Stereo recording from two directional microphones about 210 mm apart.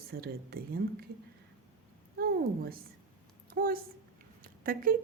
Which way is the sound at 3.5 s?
45° right (ahead or behind).